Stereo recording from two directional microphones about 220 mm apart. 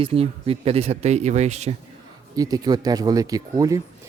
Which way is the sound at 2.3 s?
15° right (ahead or behind).